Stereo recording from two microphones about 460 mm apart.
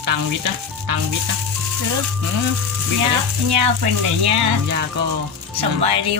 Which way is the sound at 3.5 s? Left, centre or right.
Right.